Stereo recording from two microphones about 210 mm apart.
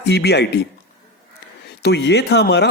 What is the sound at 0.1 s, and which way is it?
Speech, 50° left (ahead or behind).